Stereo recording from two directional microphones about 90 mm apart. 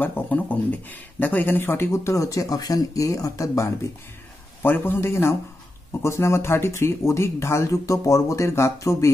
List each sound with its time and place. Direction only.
0.0 s speech: 20° left (ahead or behind); by 3.7 s 40° left (ahead or behind)
4.6 s a man's voice: 25° left (ahead or behind)